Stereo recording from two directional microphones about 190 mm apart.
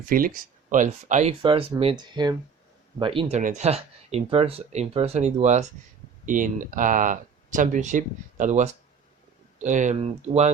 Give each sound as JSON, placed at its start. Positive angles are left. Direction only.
{"t": 0.1, "sound": "speech", "side_deg": -50}